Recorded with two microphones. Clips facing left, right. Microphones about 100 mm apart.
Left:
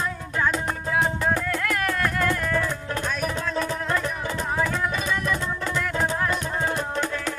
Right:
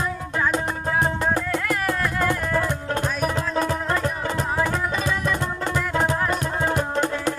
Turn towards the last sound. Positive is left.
turn(degrees=-35)  # may be behind; listen again after turning